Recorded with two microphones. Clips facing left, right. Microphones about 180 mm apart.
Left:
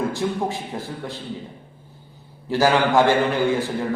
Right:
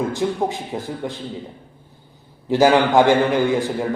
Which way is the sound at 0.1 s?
20° right (ahead or behind).